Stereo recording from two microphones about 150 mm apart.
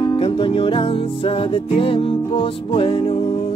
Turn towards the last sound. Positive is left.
turn(degrees=35)  # may be behind; listen again after turning